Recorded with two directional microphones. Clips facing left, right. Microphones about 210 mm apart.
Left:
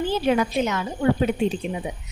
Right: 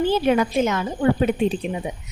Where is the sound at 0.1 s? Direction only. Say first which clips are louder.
Right 2 dB; 50° right (ahead or behind).